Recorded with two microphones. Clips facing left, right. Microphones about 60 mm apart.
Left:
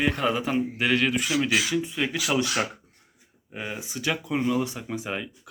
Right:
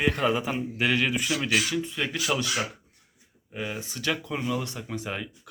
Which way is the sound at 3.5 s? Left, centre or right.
Centre.